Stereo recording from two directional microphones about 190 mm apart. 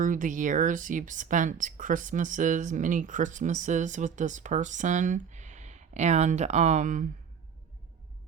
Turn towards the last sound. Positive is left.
turn(degrees=-40)  # may be behind; listen again after turning